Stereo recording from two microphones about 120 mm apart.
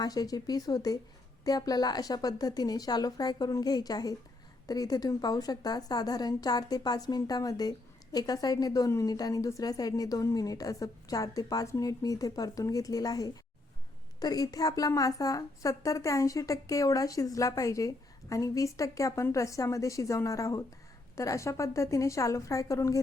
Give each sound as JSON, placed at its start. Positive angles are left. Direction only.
{"t": 0.0, "sound": "a woman's voice", "side_deg": 30}